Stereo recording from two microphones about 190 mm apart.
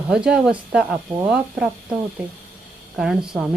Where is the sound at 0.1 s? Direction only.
5° right (ahead or behind).